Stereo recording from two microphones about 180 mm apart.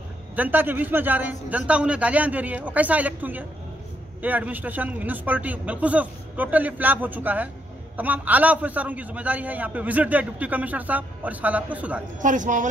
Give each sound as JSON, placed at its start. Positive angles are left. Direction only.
{"t": 0.4, "sound": "a man's voice", "side_deg": -10}
{"t": 12.2, "sound": "speech", "side_deg": -45}